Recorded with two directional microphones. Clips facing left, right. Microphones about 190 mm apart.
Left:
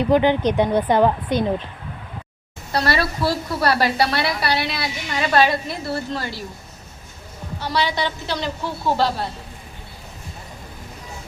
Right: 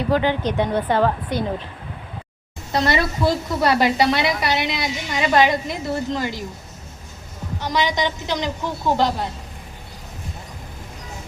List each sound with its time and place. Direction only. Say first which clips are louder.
0.1 s speech: left 3 dB; 20° left (ahead or behind)
2.7 s a woman's voice: right 1 dB; 20° right (ahead or behind)
7.6 s speech: right 1 dB; 15° right (ahead or behind)